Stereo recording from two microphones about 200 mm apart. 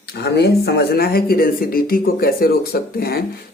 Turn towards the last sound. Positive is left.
turn(degrees=50)  # may be behind; listen again after turning